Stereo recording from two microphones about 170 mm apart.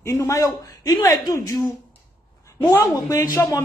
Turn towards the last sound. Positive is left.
turn(degrees=15)  # may be behind; listen again after turning